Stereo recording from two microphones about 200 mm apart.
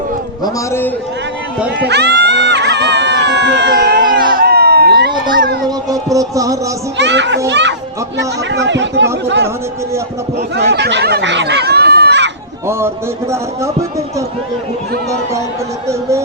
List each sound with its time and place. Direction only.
0.4 s a man's voice: 10° left (ahead or behind)
1.8 s a sound: 55° right (ahead or behind)
5.6 s music: 20° right (ahead or behind)
6.9 s a child's voice: 60° right (ahead or behind)
10.7 s speech: 60° right (ahead or behind)
15.9 s music: 15° right (ahead or behind)